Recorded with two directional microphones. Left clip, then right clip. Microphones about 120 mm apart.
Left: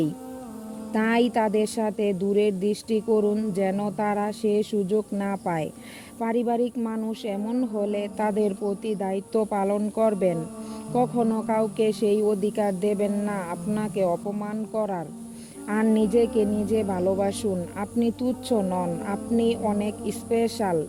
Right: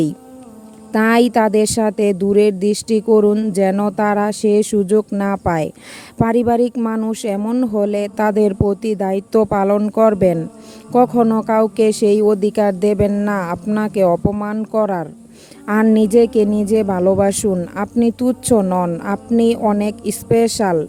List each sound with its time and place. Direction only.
0.9 s speech: 40° right (ahead or behind); by 3.3 s 55° right (ahead or behind)
3.3 s speech: 40° right (ahead or behind); by 5.0 s 60° right (ahead or behind)
5.1 s speech: 35° right (ahead or behind)
10.9 s speech: 55° right (ahead or behind)
11.3 s speech: 40° right (ahead or behind)
11.6 s speech: 50° right (ahead or behind)
15.6 s speech: 30° right (ahead or behind); by 17.5 s 50° right (ahead or behind)
17.7 s speech: 40° right (ahead or behind)
18.2 s speech: 60° right (ahead or behind)
18.6 s speech: 40° right (ahead or behind)